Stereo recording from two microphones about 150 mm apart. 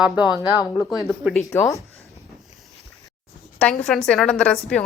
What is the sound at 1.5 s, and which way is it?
Speech, 20° left (ahead or behind).